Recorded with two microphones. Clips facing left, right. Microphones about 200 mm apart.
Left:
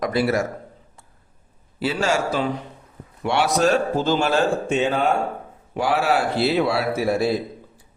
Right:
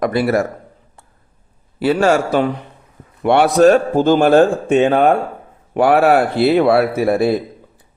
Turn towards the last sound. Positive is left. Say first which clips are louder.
# right 5 dB
turn(degrees=-60)  # may be behind; listen again after turning